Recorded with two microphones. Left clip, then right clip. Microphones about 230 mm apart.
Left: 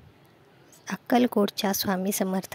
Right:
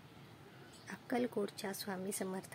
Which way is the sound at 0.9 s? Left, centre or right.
Left.